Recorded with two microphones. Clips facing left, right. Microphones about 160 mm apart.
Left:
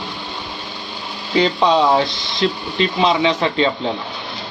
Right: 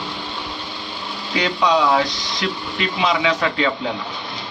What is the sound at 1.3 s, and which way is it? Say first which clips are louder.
Speech: left 4 dB; 30° left (ahead or behind).